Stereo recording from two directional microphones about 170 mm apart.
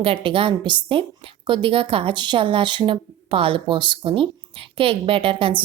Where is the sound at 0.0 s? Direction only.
30° right (ahead or behind).